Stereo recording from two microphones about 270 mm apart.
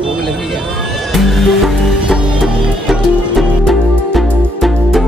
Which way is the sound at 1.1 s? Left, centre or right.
Centre.